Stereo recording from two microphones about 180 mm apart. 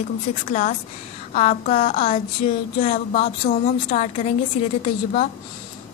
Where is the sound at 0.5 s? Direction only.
40° left (ahead or behind).